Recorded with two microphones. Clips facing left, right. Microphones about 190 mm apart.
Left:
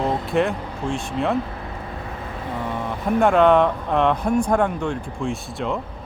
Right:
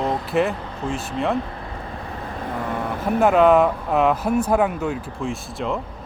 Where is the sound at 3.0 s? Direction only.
5° right (ahead or behind).